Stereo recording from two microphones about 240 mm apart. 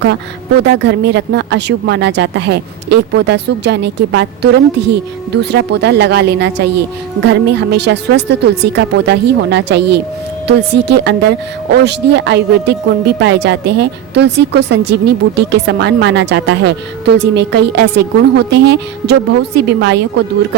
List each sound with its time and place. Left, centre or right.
0.6 s speech: right